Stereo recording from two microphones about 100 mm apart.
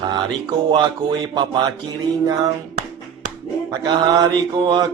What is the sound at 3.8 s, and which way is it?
Mantra, 45° right (ahead or behind).